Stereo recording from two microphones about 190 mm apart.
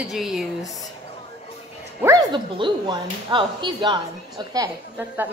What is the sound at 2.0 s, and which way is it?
Speech, 20° right (ahead or behind).